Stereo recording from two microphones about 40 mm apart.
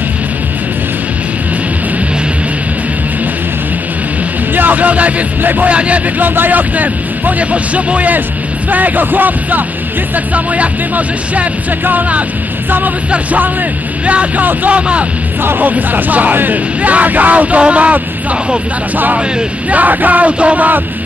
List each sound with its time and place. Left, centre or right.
4.6 s music: right
5.7 s speech: right
10.1 s speech: right
13.1 s speech: right
15.6 s speech: right
19.7 s speech: right